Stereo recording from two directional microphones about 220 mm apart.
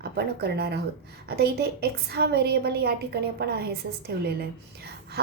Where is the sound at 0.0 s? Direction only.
45° right (ahead or behind).